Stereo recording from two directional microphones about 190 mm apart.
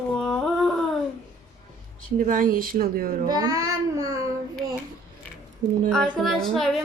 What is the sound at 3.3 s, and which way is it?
Child singing, 20° right (ahead or behind).